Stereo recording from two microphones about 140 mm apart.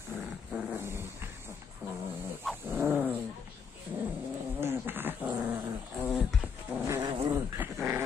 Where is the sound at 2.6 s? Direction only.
15° right (ahead or behind).